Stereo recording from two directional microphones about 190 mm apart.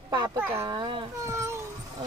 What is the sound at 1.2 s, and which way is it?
Speech, 15° right (ahead or behind).